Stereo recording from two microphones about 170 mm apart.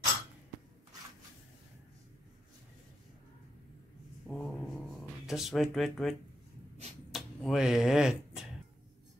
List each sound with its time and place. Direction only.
4.3 s a sound: 5° left (ahead or behind)
5.2 s speech: centre (ahead or behind)
7.1 s finger snapping: centre (ahead or behind)